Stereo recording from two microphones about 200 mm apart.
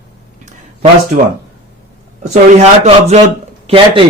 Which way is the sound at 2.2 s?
35° right (ahead or behind).